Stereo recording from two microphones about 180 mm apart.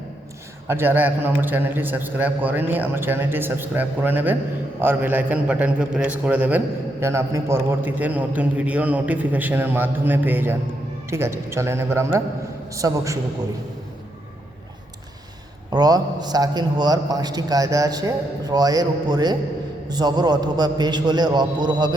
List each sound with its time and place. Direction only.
0.7 s a man's voice: 10° right (ahead or behind)
15.7 s a man's voice: 20° right (ahead or behind)